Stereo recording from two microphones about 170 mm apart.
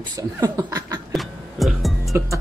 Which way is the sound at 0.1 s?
25° right (ahead or behind).